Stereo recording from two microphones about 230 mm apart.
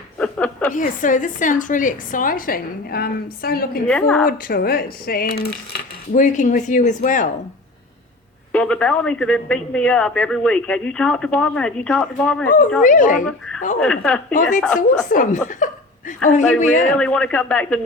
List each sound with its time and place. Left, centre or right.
0.2 s chuckle: centre
0.7 s a woman's voice: left
3.8 s a man's voice: centre
4.3 s a woman's voice: left
8.5 s a man's voice: centre
12.8 s a woman's voice: left
13.7 s a man's voice: centre
15.1 s a woman's voice: left
16.9 s a man's voice: centre